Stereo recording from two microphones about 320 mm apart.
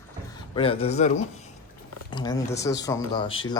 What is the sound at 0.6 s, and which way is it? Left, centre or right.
A man's voice, centre.